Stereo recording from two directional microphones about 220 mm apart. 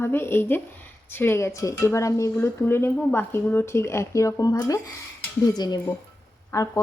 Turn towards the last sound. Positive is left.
turn(degrees=15)  # may be behind; listen again after turning